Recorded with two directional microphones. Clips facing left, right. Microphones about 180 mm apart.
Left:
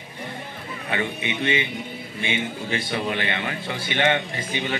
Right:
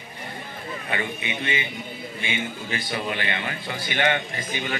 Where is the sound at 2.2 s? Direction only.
25° left (ahead or behind).